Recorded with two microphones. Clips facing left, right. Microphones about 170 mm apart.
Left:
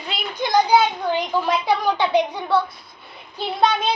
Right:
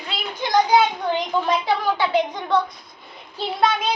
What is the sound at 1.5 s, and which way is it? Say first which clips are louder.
A woman's voice: left 2 dB; 15° left (ahead or behind).